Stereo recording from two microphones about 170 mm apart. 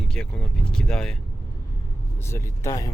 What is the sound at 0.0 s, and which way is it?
Speech, 5° left (ahead or behind).